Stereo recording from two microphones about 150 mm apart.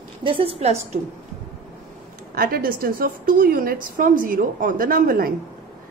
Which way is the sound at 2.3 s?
80° right.